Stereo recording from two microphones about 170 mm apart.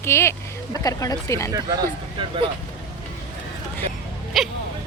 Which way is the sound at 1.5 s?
25° right (ahead or behind).